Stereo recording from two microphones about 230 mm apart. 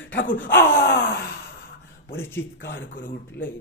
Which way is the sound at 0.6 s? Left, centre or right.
Left.